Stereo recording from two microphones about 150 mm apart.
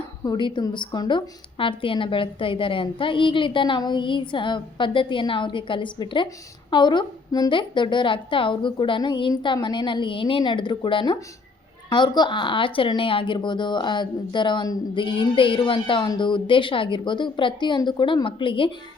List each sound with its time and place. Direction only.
0.3 s speech: 30° left (ahead or behind)